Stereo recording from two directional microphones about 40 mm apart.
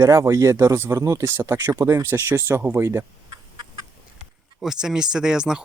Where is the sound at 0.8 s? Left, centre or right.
Right.